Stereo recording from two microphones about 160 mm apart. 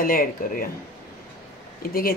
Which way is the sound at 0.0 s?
60° left (ahead or behind).